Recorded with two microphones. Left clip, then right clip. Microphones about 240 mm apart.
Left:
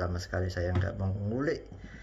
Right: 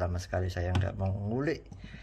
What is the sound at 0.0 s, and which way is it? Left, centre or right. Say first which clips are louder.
Speech: right 1 dB; right.